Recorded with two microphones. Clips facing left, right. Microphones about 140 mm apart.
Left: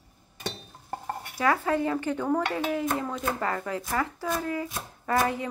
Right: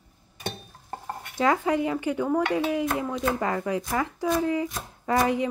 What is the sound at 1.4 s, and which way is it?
Speech, 20° right (ahead or behind).